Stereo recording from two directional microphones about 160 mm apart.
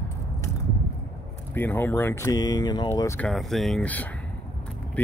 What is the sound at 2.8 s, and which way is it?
Speech, 15° left (ahead or behind).